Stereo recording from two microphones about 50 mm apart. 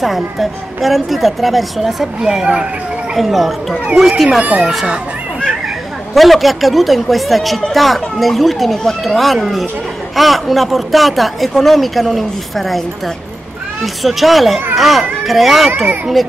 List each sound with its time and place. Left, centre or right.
0.0 s speech: centre
2.4 s speech: right
3.2 s speech: centre
4.4 s speech: right
6.1 s speech: centre